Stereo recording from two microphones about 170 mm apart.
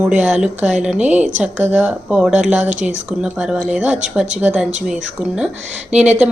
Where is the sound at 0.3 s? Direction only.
5° right (ahead or behind).